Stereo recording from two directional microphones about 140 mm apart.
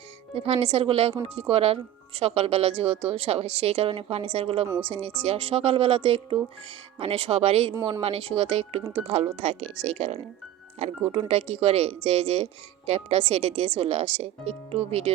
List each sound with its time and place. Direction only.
0.3 s speech: 45° right (ahead or behind)